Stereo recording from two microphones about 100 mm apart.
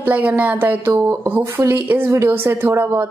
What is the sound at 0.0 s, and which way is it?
A woman's voice, 15° right (ahead or behind).